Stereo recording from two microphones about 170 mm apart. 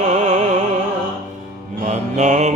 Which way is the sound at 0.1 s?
40° right (ahead or behind).